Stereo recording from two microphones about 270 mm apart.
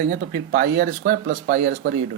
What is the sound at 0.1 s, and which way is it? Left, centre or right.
Speech, right.